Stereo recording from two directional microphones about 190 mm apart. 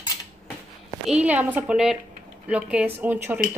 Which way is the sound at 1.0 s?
5° right (ahead or behind).